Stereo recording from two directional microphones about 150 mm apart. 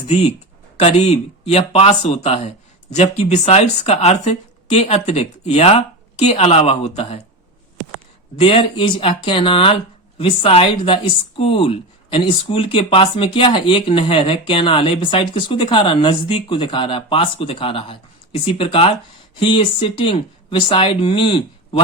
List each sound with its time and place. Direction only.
0.1 s speech: 45° left (ahead or behind)
8.4 s speech: 35° left (ahead or behind)